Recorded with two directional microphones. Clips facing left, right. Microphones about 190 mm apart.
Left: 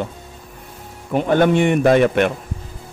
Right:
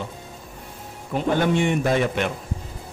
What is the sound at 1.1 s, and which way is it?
A man's voice, 60° left (ahead or behind).